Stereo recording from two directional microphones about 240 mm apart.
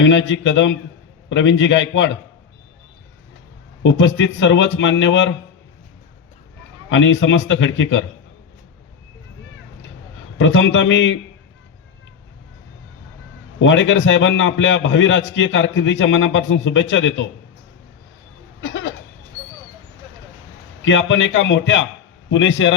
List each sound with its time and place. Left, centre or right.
0.0 s a man's voice: left
3.8 s a man's voice: left
6.9 s a man's voice: left
10.3 s a man's voice: left
13.6 s a man's voice: left
18.6 s a sound: left
20.8 s a man's voice: left